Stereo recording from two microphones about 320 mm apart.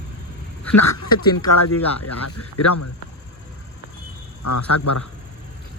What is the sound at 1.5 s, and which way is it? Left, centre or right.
Speech, left.